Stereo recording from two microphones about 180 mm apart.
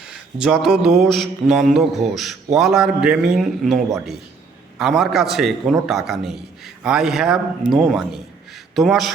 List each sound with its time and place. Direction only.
0.0 s a man's voice: 5° right (ahead or behind)